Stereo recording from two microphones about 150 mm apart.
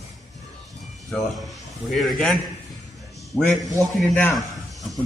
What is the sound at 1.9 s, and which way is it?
Speech, centre (ahead or behind).